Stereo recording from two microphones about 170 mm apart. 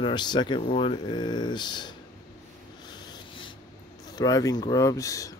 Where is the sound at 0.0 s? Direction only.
25° left (ahead or behind).